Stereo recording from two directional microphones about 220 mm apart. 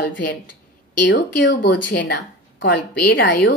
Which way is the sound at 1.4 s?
50° left (ahead or behind).